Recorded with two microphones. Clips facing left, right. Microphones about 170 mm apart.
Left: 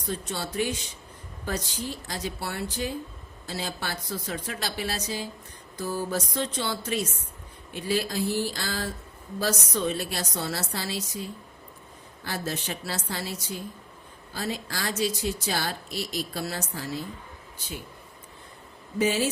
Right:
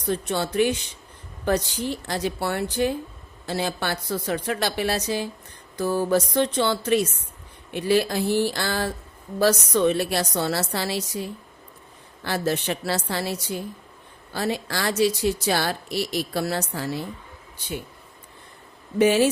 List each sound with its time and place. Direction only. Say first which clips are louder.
0.1 s a woman's voice: right 7 dB; 65° right (ahead or behind)
2.0 s a woman's voice: right 7 dB; 65° right (ahead or behind)
18.9 s speech: right 7 dB; 70° right (ahead or behind)